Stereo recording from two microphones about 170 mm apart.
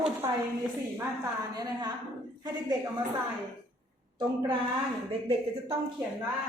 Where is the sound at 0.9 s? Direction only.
20° right (ahead or behind).